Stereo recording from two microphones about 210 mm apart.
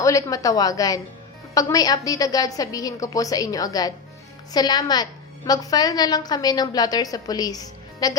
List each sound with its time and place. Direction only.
0.0 s a woman's voice: 15° left (ahead or behind)